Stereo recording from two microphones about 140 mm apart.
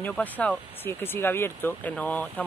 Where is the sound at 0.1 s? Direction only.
5° left (ahead or behind).